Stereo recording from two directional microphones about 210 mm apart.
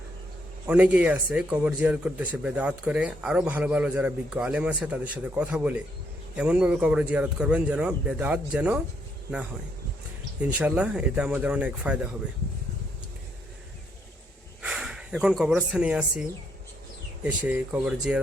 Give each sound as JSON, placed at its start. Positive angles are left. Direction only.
{"t": 0.7, "sound": "a man's voice", "side_deg": -5}
{"t": 10.4, "sound": "a man's voice", "side_deg": -10}
{"t": 14.6, "sound": "speech", "side_deg": -5}
{"t": 17.2, "sound": "a man's voice", "side_deg": -5}